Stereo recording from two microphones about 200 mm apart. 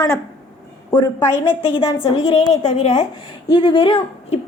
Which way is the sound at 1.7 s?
25° left (ahead or behind).